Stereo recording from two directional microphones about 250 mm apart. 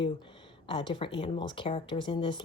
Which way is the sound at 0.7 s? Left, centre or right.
Centre.